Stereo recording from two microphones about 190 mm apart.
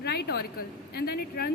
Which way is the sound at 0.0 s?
60° left (ahead or behind).